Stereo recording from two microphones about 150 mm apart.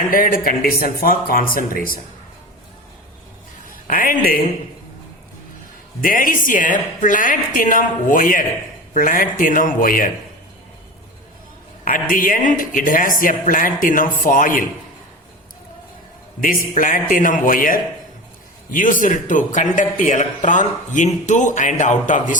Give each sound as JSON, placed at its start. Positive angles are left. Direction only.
{"t": 0.1, "sound": "speech", "side_deg": 70}
{"t": 3.7, "sound": "speech", "side_deg": 65}
{"t": 6.0, "sound": "a man's voice", "side_deg": 65}
{"t": 11.9, "sound": "a man's voice", "side_deg": 65}
{"t": 16.4, "sound": "a man's voice", "side_deg": 70}